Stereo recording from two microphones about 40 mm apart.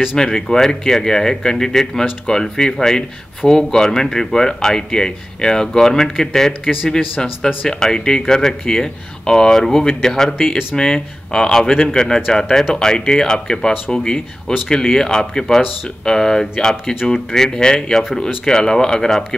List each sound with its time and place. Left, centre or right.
0.2 s speech: centre